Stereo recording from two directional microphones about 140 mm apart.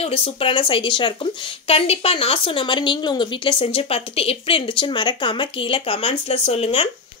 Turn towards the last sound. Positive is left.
turn(degrees=45)  # may be behind; listen again after turning